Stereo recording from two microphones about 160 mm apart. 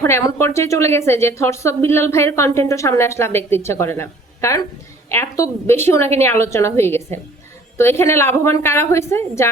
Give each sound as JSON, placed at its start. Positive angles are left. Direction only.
{"t": 0.0, "sound": "speech", "side_deg": 15}